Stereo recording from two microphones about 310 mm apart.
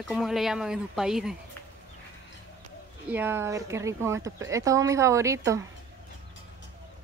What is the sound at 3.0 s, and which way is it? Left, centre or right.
A woman's voice, centre.